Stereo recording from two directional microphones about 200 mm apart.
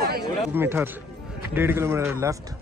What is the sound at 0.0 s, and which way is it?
Chatter, 50° right (ahead or behind).